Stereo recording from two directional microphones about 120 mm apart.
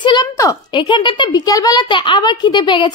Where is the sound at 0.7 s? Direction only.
40° left (ahead or behind).